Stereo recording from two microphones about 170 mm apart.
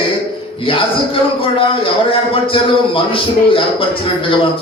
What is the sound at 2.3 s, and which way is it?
Speech, 30° left (ahead or behind).